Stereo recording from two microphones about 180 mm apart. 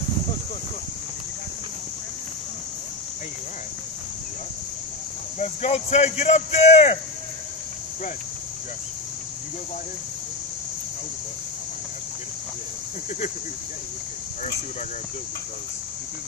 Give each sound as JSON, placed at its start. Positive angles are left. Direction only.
{"t": 5.4, "sound": "speech", "side_deg": 40}